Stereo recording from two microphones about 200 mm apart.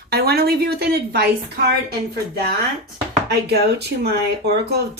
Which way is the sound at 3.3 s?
55° right (ahead or behind).